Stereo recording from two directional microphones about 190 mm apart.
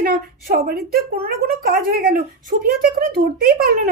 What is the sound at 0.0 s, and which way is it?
Speech, 50° right (ahead or behind).